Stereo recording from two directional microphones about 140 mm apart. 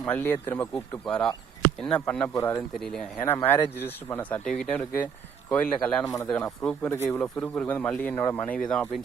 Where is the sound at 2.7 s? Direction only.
5° left (ahead or behind).